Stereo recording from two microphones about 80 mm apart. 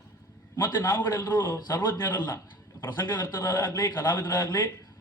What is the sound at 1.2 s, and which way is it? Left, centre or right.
Speech, left.